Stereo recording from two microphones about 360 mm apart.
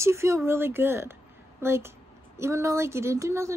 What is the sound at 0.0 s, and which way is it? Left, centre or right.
A woman's voice, centre.